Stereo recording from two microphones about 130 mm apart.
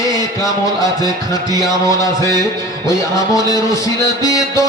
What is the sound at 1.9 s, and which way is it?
Music, 25° left (ahead or behind).